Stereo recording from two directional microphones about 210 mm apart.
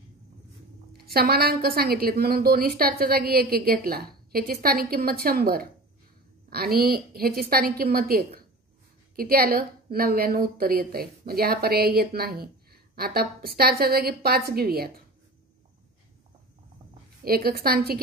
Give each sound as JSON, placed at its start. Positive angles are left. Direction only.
{"t": 0.9, "sound": "a woman's voice", "side_deg": -50}
{"t": 17.2, "sound": "a woman's voice", "side_deg": -45}